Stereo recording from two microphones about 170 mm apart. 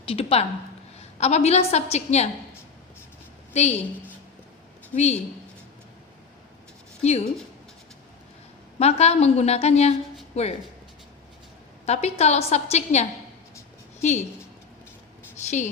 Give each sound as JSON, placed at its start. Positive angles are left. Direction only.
{"t": 0.1, "sound": "a woman's voice", "side_deg": 35}
{"t": 3.5, "sound": "a woman's voice", "side_deg": 40}
{"t": 4.9, "sound": "a woman's voice", "side_deg": 40}
{"t": 7.0, "sound": "a woman's voice", "side_deg": 40}
{"t": 8.8, "sound": "a woman's voice", "side_deg": 40}
{"t": 11.9, "sound": "a woman's voice", "side_deg": 40}
{"t": 15.4, "sound": "speech", "side_deg": 45}